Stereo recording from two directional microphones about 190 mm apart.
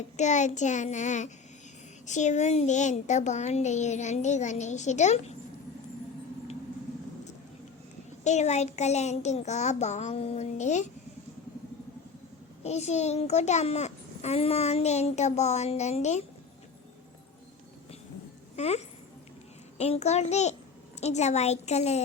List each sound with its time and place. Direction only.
0.2 s a child's voice: 40° left (ahead or behind)
8.2 s a child's voice: 35° left (ahead or behind)
12.6 s a child's voice: 35° left (ahead or behind)
18.5 s speech: 35° left (ahead or behind)
19.8 s a child's voice: 35° left (ahead or behind)